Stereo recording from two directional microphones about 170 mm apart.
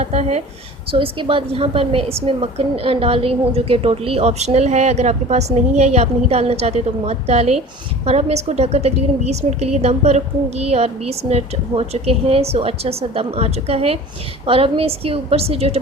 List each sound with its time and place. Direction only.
0.0 s a woman's voice: 40° right (ahead or behind)